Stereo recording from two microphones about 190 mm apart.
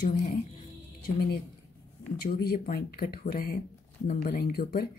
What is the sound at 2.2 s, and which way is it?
Speech, 55° left (ahead or behind).